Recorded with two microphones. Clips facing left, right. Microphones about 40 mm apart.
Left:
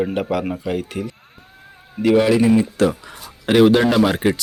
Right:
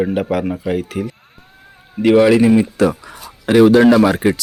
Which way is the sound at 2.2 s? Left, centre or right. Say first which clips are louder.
Right 5 dB; right.